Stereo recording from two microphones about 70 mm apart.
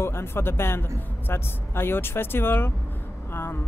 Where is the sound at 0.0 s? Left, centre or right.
Left.